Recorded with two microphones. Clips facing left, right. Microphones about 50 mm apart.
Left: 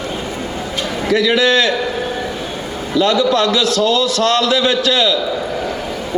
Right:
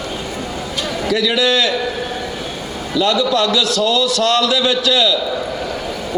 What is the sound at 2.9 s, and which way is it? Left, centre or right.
A man's voice, left.